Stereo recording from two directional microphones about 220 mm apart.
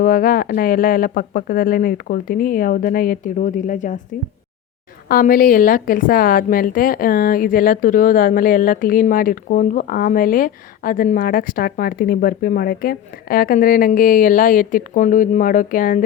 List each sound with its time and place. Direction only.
0.0 s a woman's voice: 40° left (ahead or behind)
5.0 s a woman's voice: 40° left (ahead or behind)